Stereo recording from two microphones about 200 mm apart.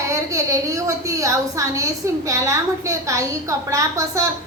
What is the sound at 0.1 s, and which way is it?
A woman's voice, 15° right (ahead or behind).